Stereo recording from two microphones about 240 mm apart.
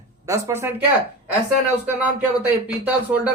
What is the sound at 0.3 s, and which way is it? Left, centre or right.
Speech, centre.